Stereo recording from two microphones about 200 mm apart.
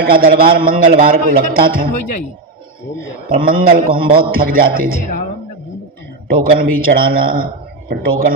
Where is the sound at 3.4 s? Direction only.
45° right (ahead or behind).